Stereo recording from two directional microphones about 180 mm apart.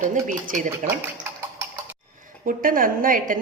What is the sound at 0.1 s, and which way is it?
Speech, 45° right (ahead or behind).